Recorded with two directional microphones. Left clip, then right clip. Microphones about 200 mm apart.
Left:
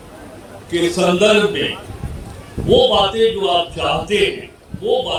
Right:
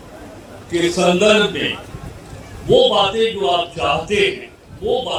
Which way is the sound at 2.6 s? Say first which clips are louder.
Even; 35° left (ahead or behind).